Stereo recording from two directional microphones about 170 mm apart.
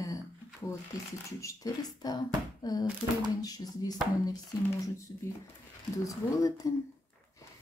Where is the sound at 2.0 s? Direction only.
20° left (ahead or behind).